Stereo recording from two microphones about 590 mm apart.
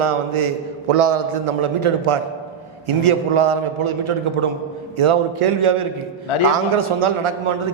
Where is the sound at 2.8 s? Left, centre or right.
Right.